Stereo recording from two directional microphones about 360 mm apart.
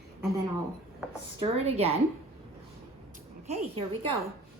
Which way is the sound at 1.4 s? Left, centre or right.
Centre.